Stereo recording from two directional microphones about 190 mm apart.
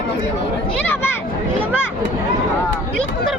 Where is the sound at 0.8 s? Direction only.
10° left (ahead or behind).